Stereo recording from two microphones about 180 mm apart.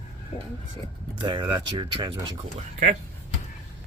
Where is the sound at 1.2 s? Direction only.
25° right (ahead or behind).